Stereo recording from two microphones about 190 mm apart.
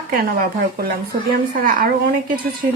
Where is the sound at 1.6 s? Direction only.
50° right (ahead or behind).